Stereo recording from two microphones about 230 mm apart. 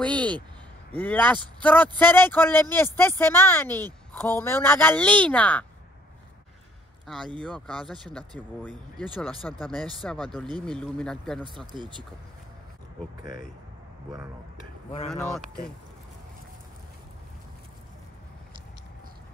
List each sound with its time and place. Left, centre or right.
0.1 s speech: centre
0.9 s speech: centre
7.4 s speech: centre
11.6 s speech: centre
15.0 s speech: centre